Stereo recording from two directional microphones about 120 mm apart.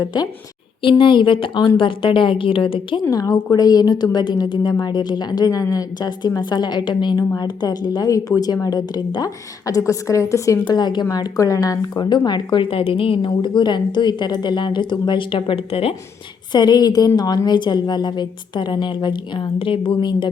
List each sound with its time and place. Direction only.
0.0 s a woman's voice: 35° left (ahead or behind)
0.8 s a woman's voice: 45° left (ahead or behind)
3.1 s a woman's voice: 30° left (ahead or behind)
10.7 s a woman's voice: 35° left (ahead or behind); by 16.0 s 55° left (ahead or behind)
16.5 s a woman's voice: 35° left (ahead or behind)